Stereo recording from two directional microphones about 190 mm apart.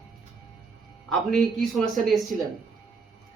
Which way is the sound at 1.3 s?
Centre (ahead or behind).